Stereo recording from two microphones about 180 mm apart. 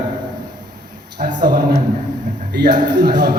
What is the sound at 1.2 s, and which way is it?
Speech, 45° right (ahead or behind).